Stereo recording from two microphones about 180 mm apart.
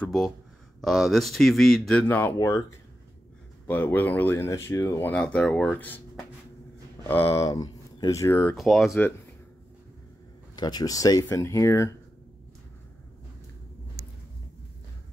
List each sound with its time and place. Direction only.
0.0 s speech: centre (ahead or behind)
8.5 s speech: centre (ahead or behind)
10.5 s speech: 25° left (ahead or behind)